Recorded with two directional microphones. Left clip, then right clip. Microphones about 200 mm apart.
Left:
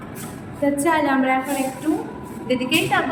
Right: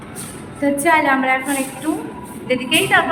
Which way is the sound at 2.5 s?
5° right (ahead or behind).